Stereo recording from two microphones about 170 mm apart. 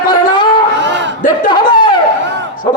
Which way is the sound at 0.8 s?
90° right.